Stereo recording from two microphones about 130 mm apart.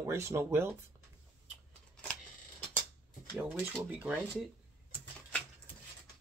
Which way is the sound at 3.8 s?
10° right (ahead or behind).